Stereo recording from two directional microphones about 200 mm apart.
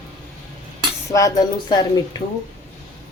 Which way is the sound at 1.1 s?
15° left (ahead or behind).